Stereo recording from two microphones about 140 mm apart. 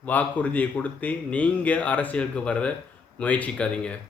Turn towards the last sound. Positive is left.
turn(degrees=10)  # may be behind; listen again after turning